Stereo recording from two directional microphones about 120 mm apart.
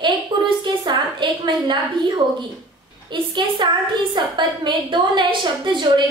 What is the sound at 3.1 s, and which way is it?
A woman's voice, 40° right (ahead or behind).